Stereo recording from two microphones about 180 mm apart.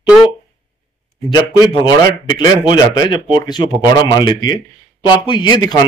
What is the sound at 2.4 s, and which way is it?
A man's voice, 25° left (ahead or behind).